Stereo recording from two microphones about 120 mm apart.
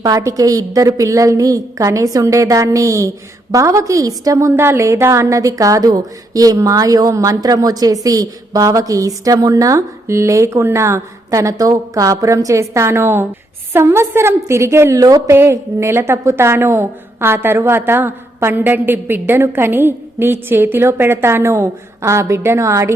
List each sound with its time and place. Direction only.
0.0 s a woman's voice: 30° right (ahead or behind)